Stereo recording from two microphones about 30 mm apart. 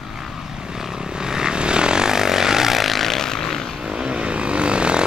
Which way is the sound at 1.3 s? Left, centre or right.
Right.